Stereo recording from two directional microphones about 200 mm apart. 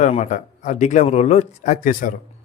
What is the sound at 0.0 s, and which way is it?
Speech, 35° left (ahead or behind).